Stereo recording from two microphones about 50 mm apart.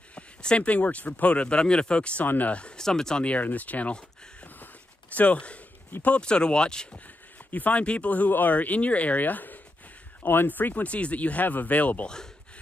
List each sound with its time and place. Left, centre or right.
0.1 s speech: left
2.2 s speech: left
2.5 s speech: left
3.3 s speech: left
5.1 s speech: left
7.5 s speech: left